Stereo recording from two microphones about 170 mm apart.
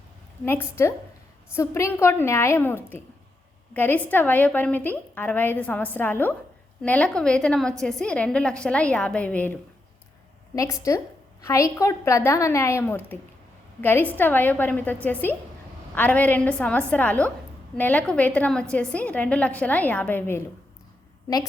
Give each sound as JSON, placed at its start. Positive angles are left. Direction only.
{"t": 0.4, "sound": "a woman's voice", "side_deg": 15}